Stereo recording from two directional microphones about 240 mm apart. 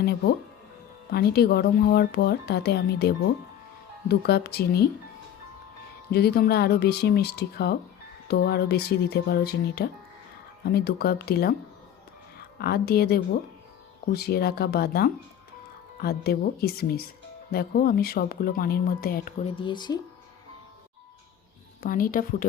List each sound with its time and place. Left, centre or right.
0.0 s speech: left
4.1 s speech: left
6.1 s speech: left
12.5 s speech: left
19.5 s speech: centre
21.8 s speech: left